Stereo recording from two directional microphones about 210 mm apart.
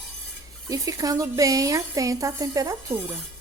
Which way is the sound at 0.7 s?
15° right (ahead or behind).